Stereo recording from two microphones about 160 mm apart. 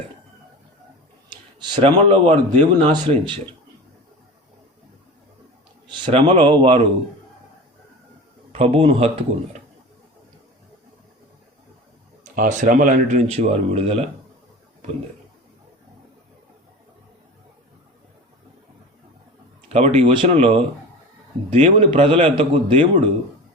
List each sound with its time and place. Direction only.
1.5 s speech: 30° right (ahead or behind)
2.0 s speech: 40° right (ahead or behind)
2.9 s a man's voice: 30° right (ahead or behind)
5.9 s speech: 30° right (ahead or behind)
6.1 s speech: 45° right (ahead or behind)
6.5 s a man's voice: 35° right (ahead or behind)
8.5 s a man's voice: 35° right (ahead or behind)
12.3 s speech: 55° right (ahead or behind); by 14.1 s 40° right (ahead or behind)
19.6 s a man's voice: 40° right (ahead or behind)